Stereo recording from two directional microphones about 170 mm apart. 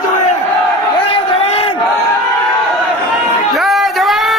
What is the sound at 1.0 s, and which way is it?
Crowd, 35° left (ahead or behind).